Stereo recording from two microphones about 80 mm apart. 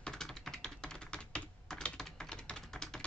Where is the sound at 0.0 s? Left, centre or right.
Centre.